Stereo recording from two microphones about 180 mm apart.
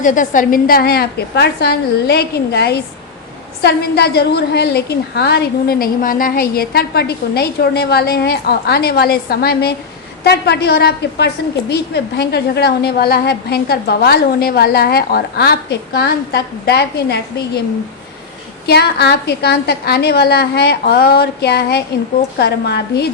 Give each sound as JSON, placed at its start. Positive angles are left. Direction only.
{"t": 0.0, "sound": "a woman's voice", "side_deg": 45}
{"t": 18.6, "sound": "a woman's voice", "side_deg": 65}